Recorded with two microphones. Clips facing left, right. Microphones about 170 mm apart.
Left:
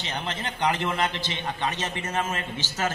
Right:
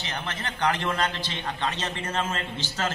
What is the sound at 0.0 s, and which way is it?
A man's voice, 20° left (ahead or behind).